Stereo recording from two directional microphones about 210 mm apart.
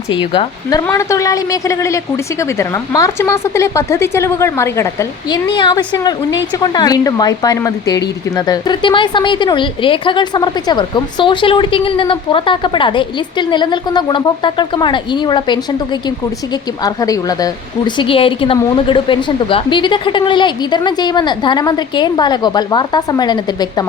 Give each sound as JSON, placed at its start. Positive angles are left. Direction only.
{"t": 0.1, "sound": "a woman's voice", "side_deg": 25}